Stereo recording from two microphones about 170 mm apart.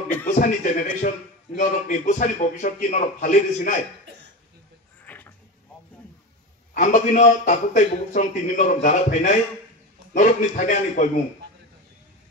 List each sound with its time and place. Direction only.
0.3 s a man's voice: 50° left (ahead or behind)
5.0 s a sound: 10° left (ahead or behind)
6.7 s a man's voice: 50° left (ahead or behind)